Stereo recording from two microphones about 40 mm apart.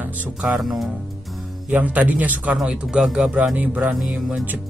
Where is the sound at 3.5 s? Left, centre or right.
Right.